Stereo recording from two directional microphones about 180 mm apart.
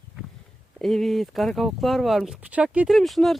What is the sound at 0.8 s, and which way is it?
Speech, centre (ahead or behind).